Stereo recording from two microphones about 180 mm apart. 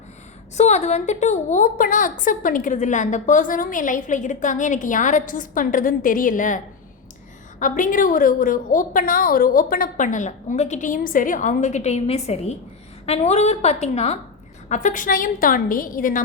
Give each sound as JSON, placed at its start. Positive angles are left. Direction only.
{"t": 0.5, "sound": "a woman's voice", "side_deg": 40}
{"t": 7.6, "sound": "a woman's voice", "side_deg": 45}